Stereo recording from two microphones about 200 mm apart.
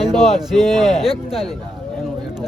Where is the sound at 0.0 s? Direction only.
Centre (ahead or behind).